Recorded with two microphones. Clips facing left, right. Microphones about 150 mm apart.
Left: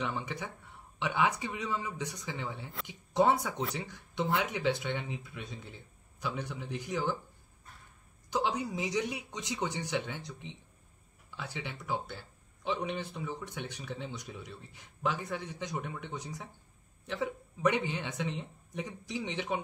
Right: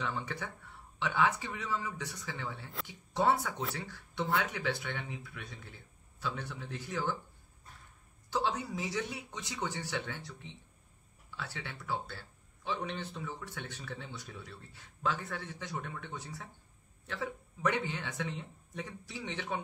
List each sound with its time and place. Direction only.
0.0 s speech: 15° left (ahead or behind)
8.3 s speech: 15° left (ahead or behind)